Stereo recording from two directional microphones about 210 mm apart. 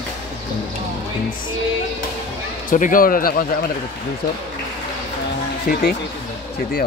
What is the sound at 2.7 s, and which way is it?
Speech, 40° left (ahead or behind).